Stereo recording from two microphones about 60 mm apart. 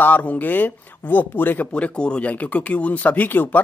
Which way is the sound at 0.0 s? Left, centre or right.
Left.